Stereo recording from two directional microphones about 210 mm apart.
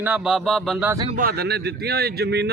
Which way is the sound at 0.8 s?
15° right (ahead or behind).